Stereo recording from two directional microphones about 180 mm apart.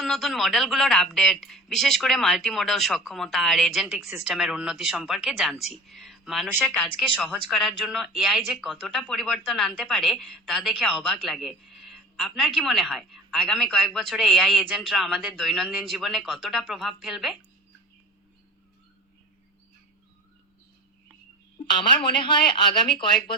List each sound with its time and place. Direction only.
0.0 s a woman's voice: centre (ahead or behind)
21.8 s speech: 25° left (ahead or behind)